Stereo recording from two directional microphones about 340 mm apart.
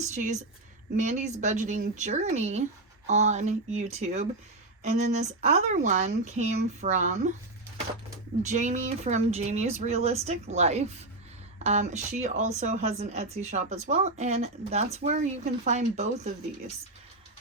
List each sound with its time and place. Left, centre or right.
0.0 s speech: centre
8.4 s speech: right